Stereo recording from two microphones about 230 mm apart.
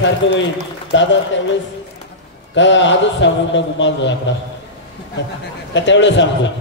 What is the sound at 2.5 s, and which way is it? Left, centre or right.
A man's voice, left.